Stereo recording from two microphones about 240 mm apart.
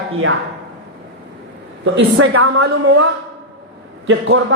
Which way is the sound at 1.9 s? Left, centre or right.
Right.